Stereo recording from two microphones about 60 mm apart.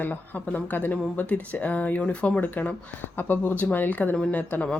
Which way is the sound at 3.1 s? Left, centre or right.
Left.